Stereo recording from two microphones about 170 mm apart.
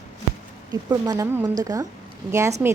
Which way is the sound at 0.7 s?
20° right (ahead or behind).